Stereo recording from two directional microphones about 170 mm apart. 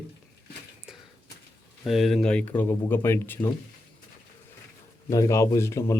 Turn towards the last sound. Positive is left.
turn(degrees=15)  # may be behind; listen again after turning